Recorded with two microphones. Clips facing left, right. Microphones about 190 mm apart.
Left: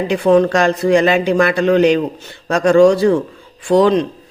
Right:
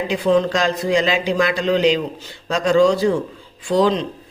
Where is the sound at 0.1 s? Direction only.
60° left (ahead or behind).